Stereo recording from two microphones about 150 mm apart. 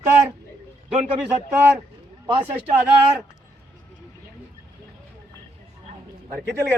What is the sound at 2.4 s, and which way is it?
Speech, 15° right (ahead or behind).